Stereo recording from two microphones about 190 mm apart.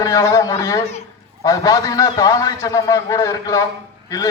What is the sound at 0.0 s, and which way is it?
A man's voice, 15° left (ahead or behind).